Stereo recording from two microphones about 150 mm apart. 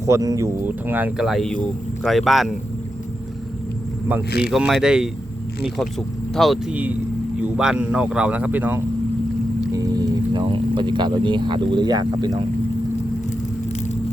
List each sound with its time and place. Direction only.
0.0 s speech: 20° right (ahead or behind); by 2.5 s centre (ahead or behind)
4.4 s speech: 5° right (ahead or behind)
9.7 s speech: 25° right (ahead or behind)